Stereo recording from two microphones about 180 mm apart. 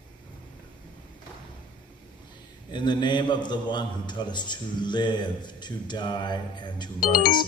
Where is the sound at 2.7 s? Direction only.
25° left (ahead or behind).